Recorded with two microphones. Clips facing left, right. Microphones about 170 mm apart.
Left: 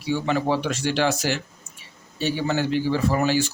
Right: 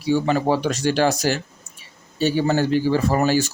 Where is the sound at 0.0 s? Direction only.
40° right (ahead or behind).